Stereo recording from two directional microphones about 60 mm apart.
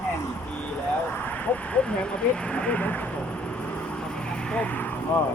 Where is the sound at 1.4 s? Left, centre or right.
Centre.